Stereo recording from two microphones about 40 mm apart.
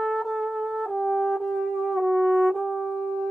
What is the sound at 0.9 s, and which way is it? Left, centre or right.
Brass instrument, centre.